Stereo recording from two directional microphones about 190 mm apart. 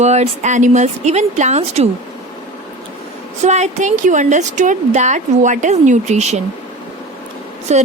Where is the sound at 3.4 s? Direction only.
40° right (ahead or behind).